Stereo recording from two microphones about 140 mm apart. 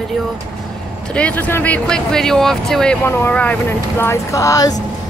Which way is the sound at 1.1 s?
10° left (ahead or behind).